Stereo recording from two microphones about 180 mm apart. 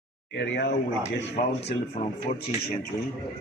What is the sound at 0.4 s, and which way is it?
Speech, 75° left (ahead or behind).